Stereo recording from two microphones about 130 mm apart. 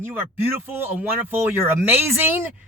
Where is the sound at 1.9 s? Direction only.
15° right (ahead or behind).